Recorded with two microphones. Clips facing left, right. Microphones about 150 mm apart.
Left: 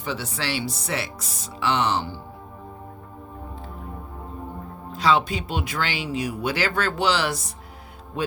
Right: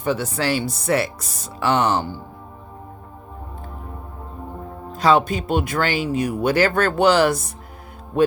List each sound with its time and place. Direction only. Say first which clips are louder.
0.0 s speech: right 7 dB; 50° right (ahead or behind)
4.9 s speech: right 4 dB; 50° right (ahead or behind)